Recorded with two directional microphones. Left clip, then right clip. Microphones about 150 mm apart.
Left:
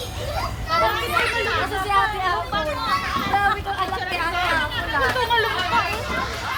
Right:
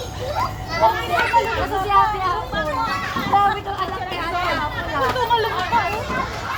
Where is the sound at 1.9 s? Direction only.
5° right (ahead or behind).